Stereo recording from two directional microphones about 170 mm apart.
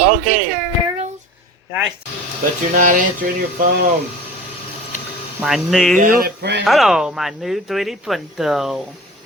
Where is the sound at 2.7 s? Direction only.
50° right (ahead or behind).